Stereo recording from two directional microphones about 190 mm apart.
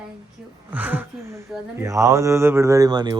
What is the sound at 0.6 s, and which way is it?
Speech, 10° right (ahead or behind).